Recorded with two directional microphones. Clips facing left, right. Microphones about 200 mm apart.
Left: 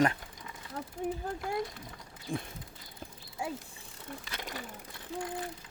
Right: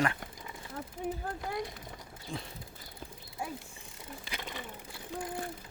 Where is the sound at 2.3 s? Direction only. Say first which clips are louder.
Left 5 dB; 50° left (ahead or behind).